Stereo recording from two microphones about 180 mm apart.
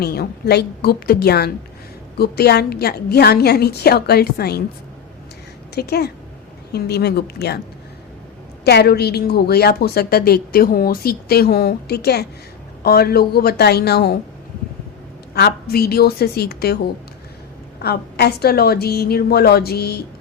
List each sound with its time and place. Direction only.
0.0 s a woman's voice: 60° left (ahead or behind)
5.7 s a woman's voice: 65° left (ahead or behind)
8.6 s a woman's voice: 65° left (ahead or behind)
15.4 s a woman's voice: 60° left (ahead or behind)
17.8 s a woman's voice: 60° left (ahead or behind)